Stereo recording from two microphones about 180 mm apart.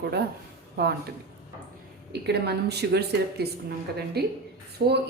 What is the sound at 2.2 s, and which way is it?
A woman's voice, 65° right (ahead or behind).